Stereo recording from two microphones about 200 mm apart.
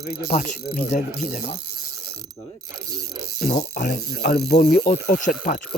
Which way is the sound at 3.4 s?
40° left (ahead or behind).